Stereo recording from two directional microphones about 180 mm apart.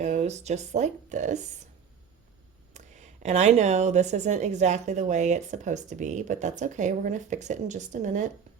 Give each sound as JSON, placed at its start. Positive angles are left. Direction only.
{"t": 0.0, "sound": "speech", "side_deg": -40}
{"t": 2.7, "sound": "speech", "side_deg": -40}